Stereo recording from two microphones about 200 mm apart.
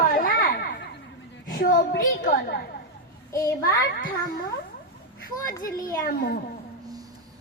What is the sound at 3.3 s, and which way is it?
Speech, 15° left (ahead or behind).